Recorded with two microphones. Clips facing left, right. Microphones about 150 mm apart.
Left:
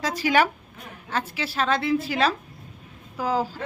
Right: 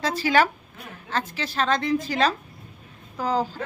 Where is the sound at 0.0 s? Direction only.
10° left (ahead or behind).